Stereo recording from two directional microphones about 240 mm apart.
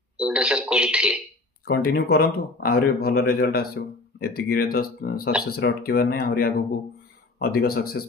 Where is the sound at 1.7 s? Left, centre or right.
Left.